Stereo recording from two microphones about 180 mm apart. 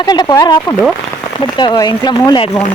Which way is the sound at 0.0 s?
25° left (ahead or behind).